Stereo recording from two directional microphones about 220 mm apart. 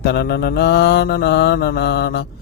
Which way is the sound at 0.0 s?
45° left (ahead or behind).